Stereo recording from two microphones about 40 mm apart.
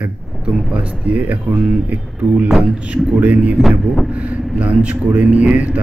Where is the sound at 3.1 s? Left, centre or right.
Right.